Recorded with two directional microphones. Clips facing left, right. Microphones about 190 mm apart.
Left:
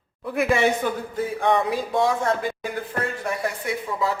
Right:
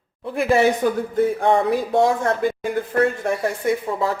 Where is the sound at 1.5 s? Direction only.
50° right (ahead or behind).